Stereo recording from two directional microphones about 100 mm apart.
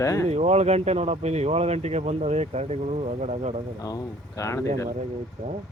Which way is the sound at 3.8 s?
35° left (ahead or behind).